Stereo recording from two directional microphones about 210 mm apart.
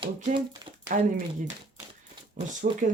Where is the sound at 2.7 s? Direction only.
40° right (ahead or behind).